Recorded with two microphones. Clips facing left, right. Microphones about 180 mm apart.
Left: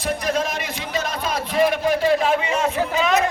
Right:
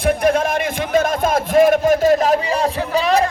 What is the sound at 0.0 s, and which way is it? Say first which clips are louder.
Music: right 7 dB; 55° right (ahead or behind).